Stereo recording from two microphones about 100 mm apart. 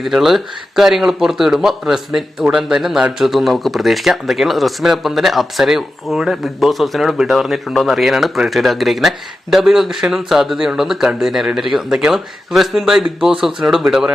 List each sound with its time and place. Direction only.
0.0 s speech: 5° right (ahead or behind)